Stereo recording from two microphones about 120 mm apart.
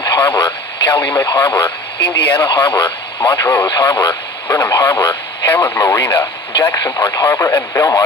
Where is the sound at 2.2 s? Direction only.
40° left (ahead or behind).